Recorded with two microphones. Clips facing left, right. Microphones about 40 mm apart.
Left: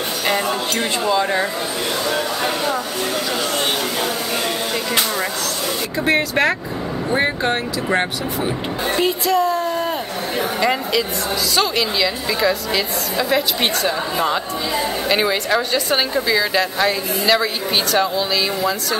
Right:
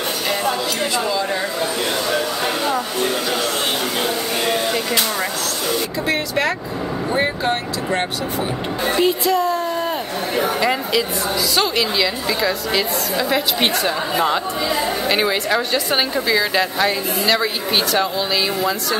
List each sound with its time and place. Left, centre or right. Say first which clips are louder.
2.0 s a woman's voice: even; centre
6.0 s speech: left 5 dB; left
7.2 s speech: left 1 dB; centre
8.9 s a woman's voice: even; centre